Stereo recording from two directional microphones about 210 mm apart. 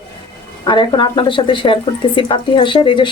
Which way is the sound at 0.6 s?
20° left (ahead or behind).